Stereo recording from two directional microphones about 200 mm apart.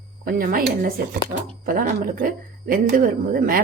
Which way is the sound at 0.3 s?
45° right (ahead or behind).